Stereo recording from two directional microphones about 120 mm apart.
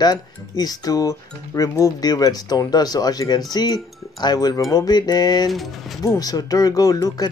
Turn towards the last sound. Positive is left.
turn(degrees=30)  # may be behind; listen again after turning